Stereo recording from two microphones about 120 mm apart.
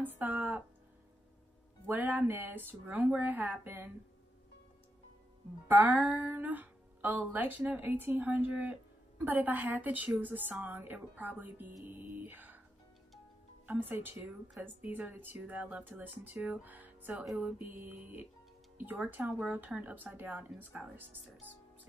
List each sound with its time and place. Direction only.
0.0 s music: 15° right (ahead or behind)
1.9 s speech: 15° right (ahead or behind)
5.7 s speech: 15° right (ahead or behind)
11.8 s mantra: 15° right (ahead or behind)
13.7 s speech: 15° right (ahead or behind)
17.3 s music: 5° right (ahead or behind)
17.8 s speech: 15° right (ahead or behind)